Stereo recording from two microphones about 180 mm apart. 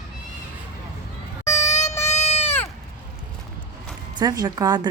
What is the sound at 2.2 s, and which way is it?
Sheep, 35° left (ahead or behind).